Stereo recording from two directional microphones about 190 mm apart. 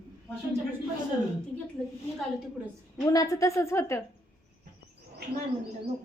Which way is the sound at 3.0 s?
20° left (ahead or behind).